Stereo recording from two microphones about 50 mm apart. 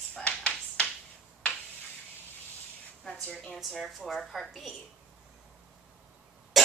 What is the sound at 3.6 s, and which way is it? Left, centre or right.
Speech, centre.